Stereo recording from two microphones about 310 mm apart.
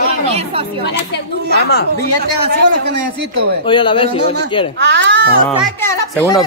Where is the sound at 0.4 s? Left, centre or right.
Centre.